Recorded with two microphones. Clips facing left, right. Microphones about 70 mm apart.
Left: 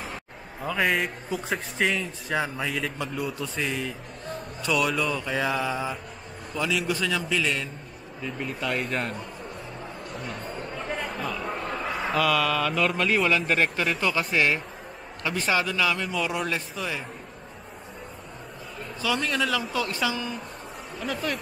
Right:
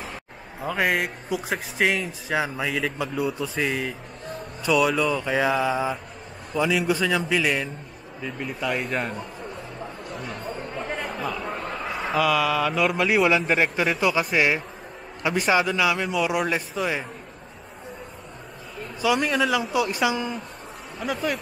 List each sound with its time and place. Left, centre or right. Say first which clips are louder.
0.0 s speech: even; centre
3.3 s a man's voice: right 4 dB; centre
18.9 s speech: right 5 dB; centre
21.0 s a man's voice: right 3 dB; centre